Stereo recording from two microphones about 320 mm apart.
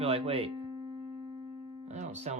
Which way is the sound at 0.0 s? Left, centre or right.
Centre.